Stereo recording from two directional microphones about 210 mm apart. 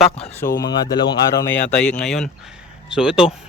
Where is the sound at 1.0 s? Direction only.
15° left (ahead or behind).